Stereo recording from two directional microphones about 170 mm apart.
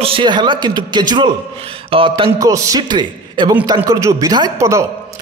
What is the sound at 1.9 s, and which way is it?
Music, 30° right (ahead or behind).